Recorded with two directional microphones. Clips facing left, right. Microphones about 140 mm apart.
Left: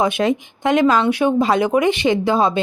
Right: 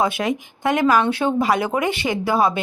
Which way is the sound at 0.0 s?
25° left (ahead or behind).